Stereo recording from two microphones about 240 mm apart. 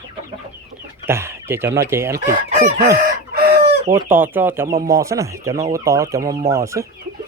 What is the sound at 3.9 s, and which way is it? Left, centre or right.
Speech, centre.